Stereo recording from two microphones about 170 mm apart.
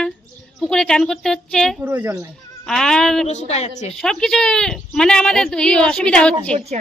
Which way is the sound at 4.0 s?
5° left (ahead or behind).